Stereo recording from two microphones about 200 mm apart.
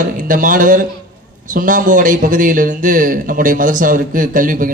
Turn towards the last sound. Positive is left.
turn(degrees=-40)  # may be behind; listen again after turning